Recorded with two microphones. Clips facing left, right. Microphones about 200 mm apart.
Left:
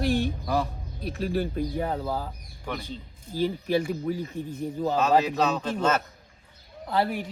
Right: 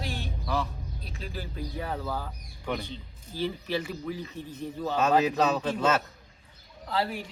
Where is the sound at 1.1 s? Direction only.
55° left (ahead or behind).